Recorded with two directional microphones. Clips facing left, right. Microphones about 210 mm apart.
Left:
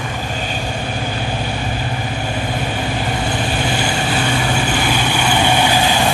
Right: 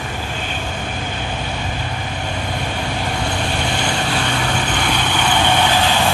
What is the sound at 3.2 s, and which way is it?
Vehicle, 5° left (ahead or behind).